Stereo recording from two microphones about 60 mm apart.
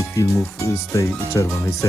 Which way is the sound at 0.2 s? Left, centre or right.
Left.